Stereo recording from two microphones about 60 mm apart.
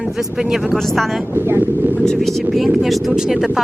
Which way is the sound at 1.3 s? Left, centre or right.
Right.